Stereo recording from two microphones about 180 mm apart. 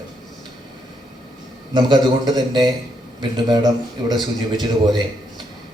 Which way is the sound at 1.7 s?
25° right (ahead or behind).